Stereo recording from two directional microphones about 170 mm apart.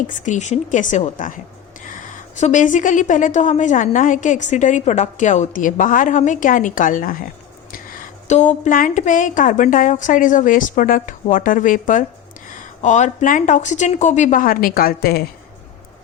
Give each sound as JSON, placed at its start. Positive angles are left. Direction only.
{"t": 0.1, "sound": "a woman's voice", "side_deg": 45}